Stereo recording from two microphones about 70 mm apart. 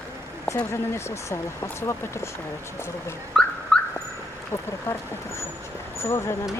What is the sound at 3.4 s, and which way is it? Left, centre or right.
Car alarm, centre.